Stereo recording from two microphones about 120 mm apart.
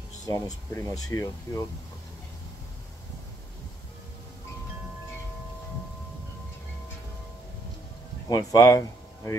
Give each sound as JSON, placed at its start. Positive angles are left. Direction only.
{"t": 0.3, "sound": "speech", "side_deg": 30}
{"t": 8.3, "sound": "speech", "side_deg": 30}